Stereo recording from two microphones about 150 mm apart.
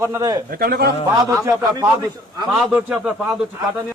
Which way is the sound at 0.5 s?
90° right.